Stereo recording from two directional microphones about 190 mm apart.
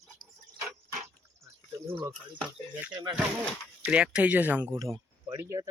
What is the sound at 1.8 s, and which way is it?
Speech, 25° right (ahead or behind).